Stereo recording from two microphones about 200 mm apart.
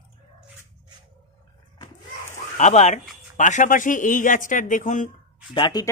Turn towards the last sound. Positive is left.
turn(degrees=20)  # may be behind; listen again after turning